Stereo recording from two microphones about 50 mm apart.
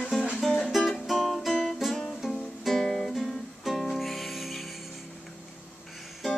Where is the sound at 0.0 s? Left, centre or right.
Centre.